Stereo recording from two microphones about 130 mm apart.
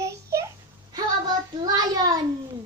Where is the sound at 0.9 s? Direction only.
30° right (ahead or behind).